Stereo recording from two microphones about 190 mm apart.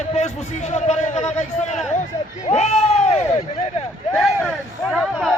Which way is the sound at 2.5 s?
35° left (ahead or behind).